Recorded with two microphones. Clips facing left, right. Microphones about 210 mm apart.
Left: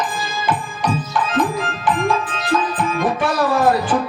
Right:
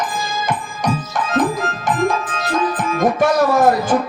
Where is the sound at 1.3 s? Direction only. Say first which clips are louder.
Right 4 dB; 45° right (ahead or behind).